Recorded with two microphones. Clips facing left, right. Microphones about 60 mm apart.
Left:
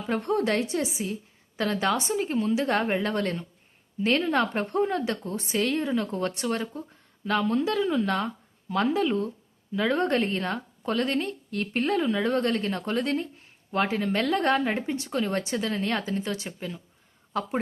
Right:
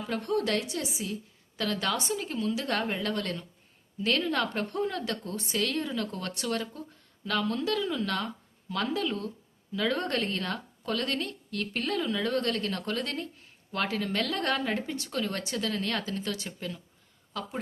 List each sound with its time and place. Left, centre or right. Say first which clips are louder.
0.1 s a woman's voice: left 4 dB; left
17.3 s a woman's voice: left 7 dB; left